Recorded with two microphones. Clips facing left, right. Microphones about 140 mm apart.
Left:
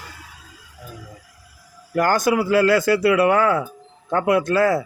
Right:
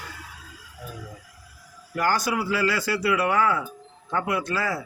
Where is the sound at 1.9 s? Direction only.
50° left (ahead or behind).